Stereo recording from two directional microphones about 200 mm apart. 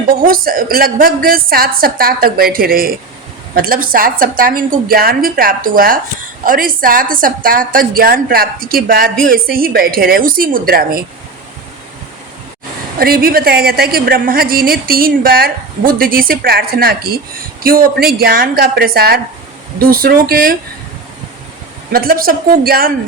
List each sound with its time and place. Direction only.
0.3 s a woman's voice: 45° right (ahead or behind)
13.0 s a woman's voice: 50° right (ahead or behind)
21.9 s a woman's voice: 45° right (ahead or behind)